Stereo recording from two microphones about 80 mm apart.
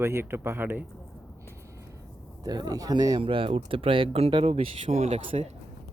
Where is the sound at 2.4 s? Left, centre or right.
Right.